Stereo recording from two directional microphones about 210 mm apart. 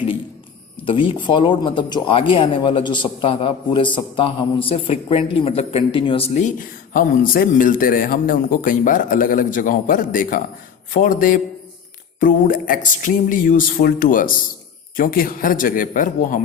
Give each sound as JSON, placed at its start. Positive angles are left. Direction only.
{"t": 0.9, "sound": "speech", "side_deg": 25}